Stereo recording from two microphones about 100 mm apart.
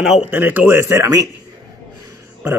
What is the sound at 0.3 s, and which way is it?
Speech, 15° right (ahead or behind).